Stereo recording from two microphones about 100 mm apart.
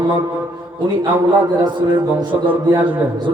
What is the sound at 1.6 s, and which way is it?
Music, 50° right (ahead or behind).